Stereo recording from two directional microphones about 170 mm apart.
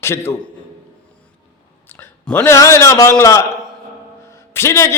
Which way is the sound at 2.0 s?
10° left (ahead or behind).